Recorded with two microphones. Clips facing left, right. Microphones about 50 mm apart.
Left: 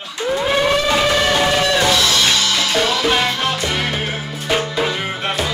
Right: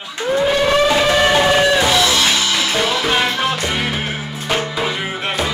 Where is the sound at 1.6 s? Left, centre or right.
Centre.